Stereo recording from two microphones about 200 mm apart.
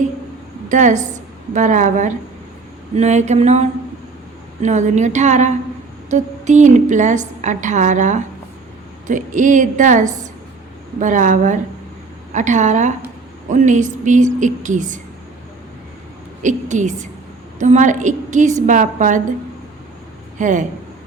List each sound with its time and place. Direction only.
0.7 s a woman's voice: 40° right (ahead or behind)
16.4 s a woman's voice: 40° right (ahead or behind)
20.4 s a woman's voice: 40° right (ahead or behind)